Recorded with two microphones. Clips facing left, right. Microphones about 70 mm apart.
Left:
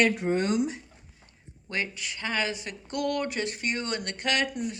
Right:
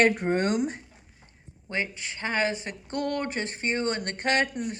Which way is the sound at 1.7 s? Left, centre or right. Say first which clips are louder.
Right 1 dB; right.